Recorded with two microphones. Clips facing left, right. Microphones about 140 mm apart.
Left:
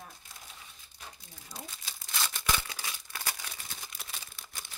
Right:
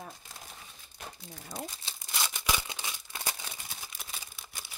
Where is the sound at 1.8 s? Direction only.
20° right (ahead or behind).